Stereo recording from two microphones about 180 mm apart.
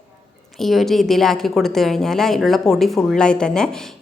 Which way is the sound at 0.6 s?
Centre (ahead or behind).